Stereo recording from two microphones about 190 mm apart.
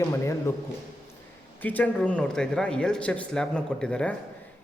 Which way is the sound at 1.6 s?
10° left (ahead or behind).